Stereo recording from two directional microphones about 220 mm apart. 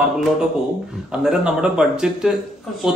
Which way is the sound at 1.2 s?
5° right (ahead or behind).